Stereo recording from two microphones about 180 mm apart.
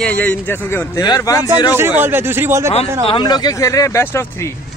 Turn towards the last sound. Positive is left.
turn(degrees=15)  # may be behind; listen again after turning